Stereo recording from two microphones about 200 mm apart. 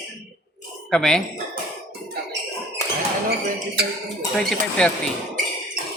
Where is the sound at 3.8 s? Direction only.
55° right (ahead or behind).